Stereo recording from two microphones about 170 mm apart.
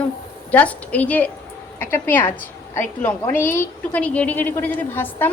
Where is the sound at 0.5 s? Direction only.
10° left (ahead or behind).